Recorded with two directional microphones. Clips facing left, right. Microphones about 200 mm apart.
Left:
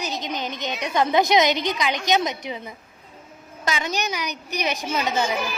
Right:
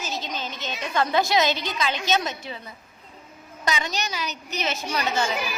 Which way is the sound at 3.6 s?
10° left (ahead or behind).